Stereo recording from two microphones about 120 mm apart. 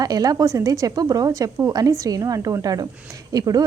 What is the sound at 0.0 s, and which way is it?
A woman's voice, 30° right (ahead or behind).